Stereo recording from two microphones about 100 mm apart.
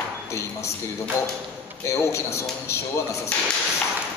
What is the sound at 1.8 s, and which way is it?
Speech, 30° left (ahead or behind).